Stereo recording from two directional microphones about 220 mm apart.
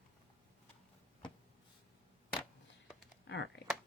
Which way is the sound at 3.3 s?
50° left (ahead or behind).